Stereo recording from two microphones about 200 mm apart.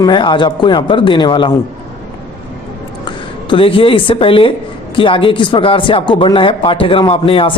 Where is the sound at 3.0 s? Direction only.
25° left (ahead or behind).